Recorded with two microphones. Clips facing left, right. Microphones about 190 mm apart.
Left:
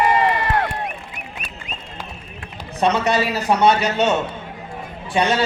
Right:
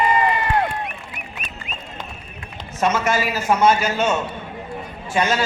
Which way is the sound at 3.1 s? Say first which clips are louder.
Left 1 dB; 35° left (ahead or behind).